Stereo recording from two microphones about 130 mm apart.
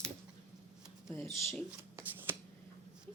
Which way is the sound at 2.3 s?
20° right (ahead or behind).